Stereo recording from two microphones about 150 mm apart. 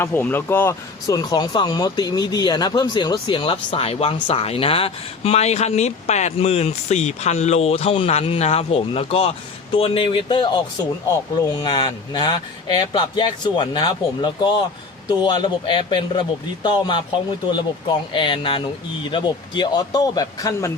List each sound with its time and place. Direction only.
0.0 s speech: 10° left (ahead or behind); by 10.6 s 30° left (ahead or behind)
11.6 s speech: 30° left (ahead or behind)